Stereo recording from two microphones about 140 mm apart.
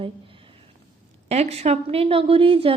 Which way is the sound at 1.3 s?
50° right (ahead or behind).